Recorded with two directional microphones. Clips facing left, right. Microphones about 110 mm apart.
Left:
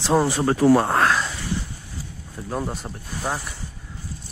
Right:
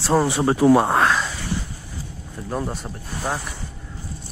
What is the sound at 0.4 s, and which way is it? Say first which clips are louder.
Speech: right 2 dB; 20° right (ahead or behind).